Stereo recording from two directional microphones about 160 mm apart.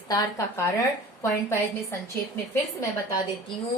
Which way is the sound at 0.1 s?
20° left (ahead or behind).